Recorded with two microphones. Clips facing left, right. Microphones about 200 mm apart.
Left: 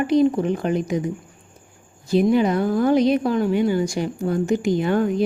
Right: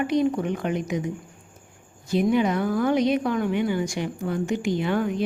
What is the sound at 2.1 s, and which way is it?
Speech, 35° left (ahead or behind).